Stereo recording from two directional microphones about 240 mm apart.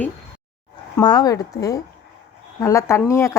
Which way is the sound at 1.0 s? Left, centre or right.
Centre.